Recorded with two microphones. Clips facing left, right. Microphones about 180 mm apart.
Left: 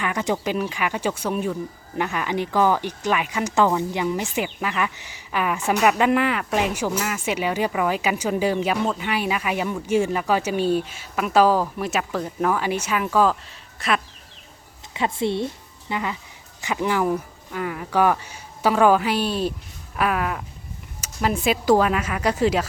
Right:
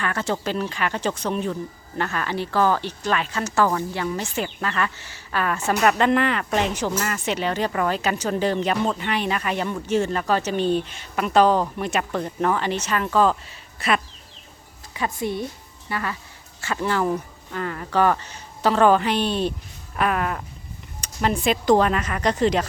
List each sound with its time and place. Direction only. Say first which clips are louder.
0.0 s speech: left 1 dB; 15° left (ahead or behind); by 14.0 s centre (ahead or behind)
14.9 s a woman's voice: left 3 dB; 25° left (ahead or behind); by 22.6 s 5° left (ahead or behind)